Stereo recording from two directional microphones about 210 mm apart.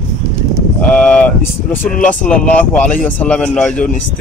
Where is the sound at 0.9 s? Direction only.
5° left (ahead or behind).